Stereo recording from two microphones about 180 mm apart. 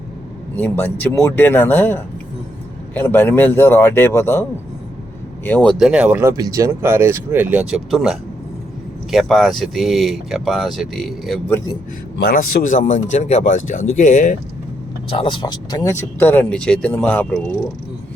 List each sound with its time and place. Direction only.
0.5 s speech: 10° left (ahead or behind)
5.5 s speech: 10° left (ahead or behind)
5.8 s speech: 5° right (ahead or behind)
12.2 s speech: 50° left (ahead or behind)
15.1 s speech: 30° left (ahead or behind); by 17.4 s 10° left (ahead or behind)